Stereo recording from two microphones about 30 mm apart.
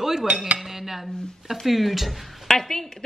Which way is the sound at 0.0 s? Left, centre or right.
Centre.